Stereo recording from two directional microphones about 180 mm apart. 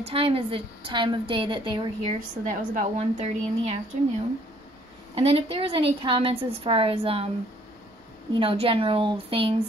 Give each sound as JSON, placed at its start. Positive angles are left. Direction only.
{"t": 0.0, "sound": "a woman's voice", "side_deg": -30}
{"t": 2.4, "sound": "a woman's voice", "side_deg": -45}
{"t": 5.1, "sound": "a woman's voice", "side_deg": -35}
{"t": 8.4, "sound": "a woman's voice", "side_deg": -30}